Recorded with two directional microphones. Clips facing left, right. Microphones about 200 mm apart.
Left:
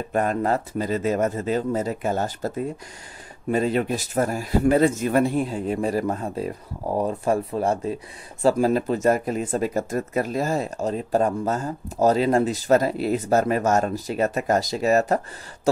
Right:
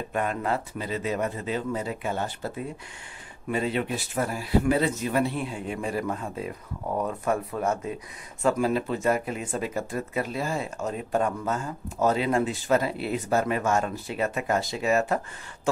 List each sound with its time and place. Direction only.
0.1 s speech: 40° left (ahead or behind)